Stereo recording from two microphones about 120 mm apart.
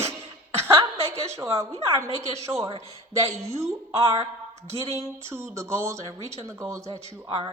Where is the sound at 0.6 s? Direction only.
20° right (ahead or behind).